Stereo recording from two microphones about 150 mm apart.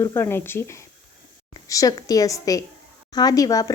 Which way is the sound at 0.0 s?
20° left (ahead or behind).